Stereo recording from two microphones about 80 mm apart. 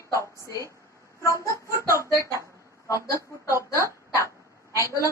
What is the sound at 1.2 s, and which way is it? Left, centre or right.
Speech, left.